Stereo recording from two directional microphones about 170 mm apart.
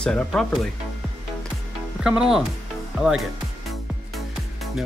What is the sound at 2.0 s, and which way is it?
Speech, 5° right (ahead or behind).